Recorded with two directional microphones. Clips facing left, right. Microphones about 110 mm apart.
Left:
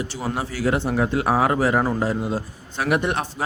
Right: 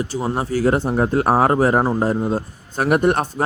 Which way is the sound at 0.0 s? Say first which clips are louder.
Right 4 dB; 40° right (ahead or behind).